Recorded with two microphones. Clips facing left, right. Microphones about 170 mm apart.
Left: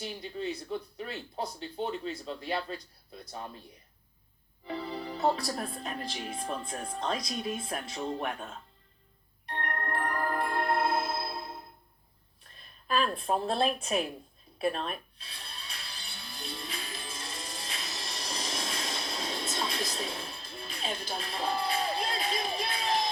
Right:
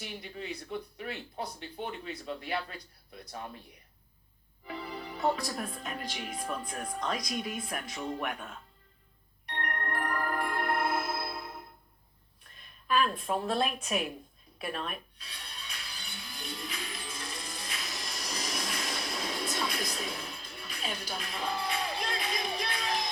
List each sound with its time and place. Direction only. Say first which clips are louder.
0.0 s speech: left 5 dB; 30° left (ahead or behind)
4.6 s speech: left 4 dB; 30° left (ahead or behind)
9.5 s music: left 2 dB; 30° left (ahead or behind)
12.9 s speech: even; 35° left (ahead or behind)
14.6 s music: left 6 dB; 30° left (ahead or behind)